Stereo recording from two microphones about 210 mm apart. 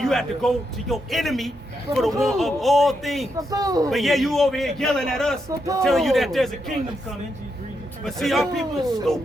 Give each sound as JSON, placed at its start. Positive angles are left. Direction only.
{"t": 0.0, "sound": "a man's voice", "side_deg": 0}
{"t": 3.3, "sound": "a man's voice", "side_deg": -15}
{"t": 3.8, "sound": "a man's voice", "side_deg": 0}
{"t": 5.5, "sound": "a man's voice", "side_deg": -15}
{"t": 5.8, "sound": "a man's voice", "side_deg": 0}
{"t": 8.0, "sound": "a man's voice", "side_deg": 0}